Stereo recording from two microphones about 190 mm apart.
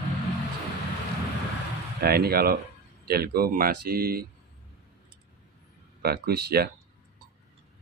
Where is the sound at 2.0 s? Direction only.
55° right (ahead or behind).